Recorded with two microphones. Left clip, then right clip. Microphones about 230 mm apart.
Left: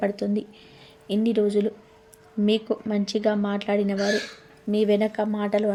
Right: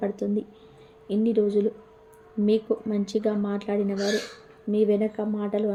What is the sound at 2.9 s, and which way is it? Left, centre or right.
A woman's voice, centre.